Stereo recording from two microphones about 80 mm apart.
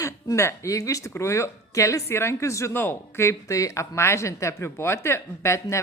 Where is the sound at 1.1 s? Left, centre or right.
Left.